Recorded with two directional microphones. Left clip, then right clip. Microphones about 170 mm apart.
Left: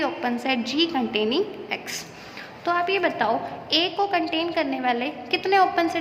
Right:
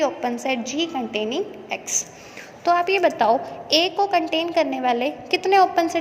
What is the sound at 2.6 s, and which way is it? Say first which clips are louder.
A woman's voice: right 4 dB; 30° right (ahead or behind).